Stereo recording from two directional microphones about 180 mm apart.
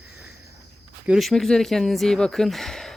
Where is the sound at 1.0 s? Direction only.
Centre (ahead or behind).